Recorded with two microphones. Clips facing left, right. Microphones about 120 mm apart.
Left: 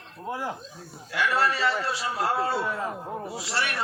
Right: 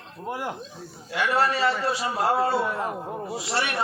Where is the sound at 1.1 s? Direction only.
20° right (ahead or behind).